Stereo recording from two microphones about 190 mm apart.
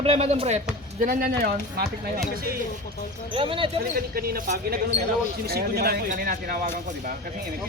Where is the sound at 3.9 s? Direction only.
50° right (ahead or behind).